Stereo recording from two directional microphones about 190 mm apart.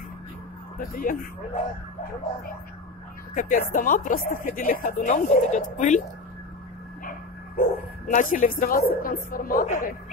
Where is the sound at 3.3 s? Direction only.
45° left (ahead or behind).